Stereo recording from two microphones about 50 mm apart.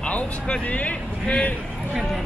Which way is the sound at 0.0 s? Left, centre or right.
Left.